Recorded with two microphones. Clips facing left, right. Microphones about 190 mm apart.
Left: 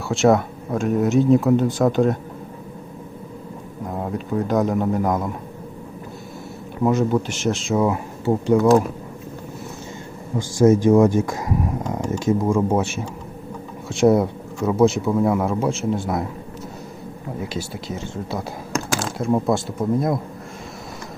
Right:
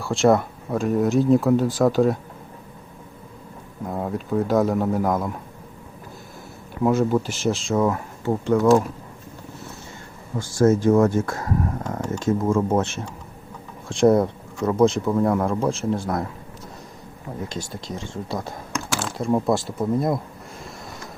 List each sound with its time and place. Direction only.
0.0 s speech: centre (ahead or behind)
4.0 s speech: centre (ahead or behind)
6.8 s speech: centre (ahead or behind); by 8.8 s 15° left (ahead or behind)
10.3 s speech: 15° left (ahead or behind)
17.5 s speech: 5° left (ahead or behind)
18.7 s typing: 40° left (ahead or behind)
19.1 s speech: centre (ahead or behind)